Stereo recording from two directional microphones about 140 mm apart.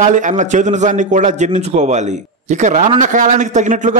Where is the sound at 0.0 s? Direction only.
65° right (ahead or behind).